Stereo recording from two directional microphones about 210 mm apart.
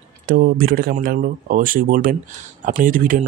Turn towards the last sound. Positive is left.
turn(degrees=-40)  # may be behind; listen again after turning